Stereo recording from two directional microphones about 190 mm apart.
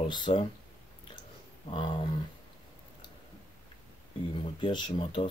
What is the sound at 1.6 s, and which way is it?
Speech, 25° left (ahead or behind).